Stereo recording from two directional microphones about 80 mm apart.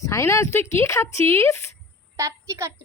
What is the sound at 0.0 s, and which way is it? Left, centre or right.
Speech, left.